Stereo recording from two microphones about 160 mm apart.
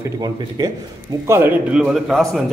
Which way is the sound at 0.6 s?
30° right (ahead or behind).